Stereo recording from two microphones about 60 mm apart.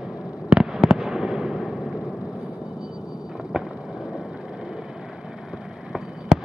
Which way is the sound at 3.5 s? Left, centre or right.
Centre.